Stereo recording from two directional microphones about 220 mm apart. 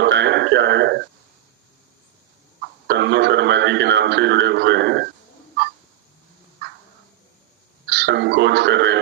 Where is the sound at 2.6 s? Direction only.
50° right (ahead or behind).